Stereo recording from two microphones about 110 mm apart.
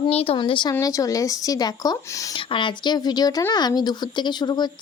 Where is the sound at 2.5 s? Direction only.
45° left (ahead or behind).